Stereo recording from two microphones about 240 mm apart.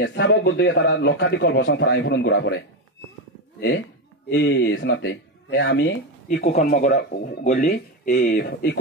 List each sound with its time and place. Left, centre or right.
0.0 s a man's voice: left
4.3 s a man's voice: left
6.2 s speech: left